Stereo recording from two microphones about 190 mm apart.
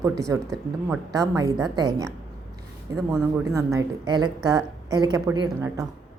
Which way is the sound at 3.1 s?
15° right (ahead or behind).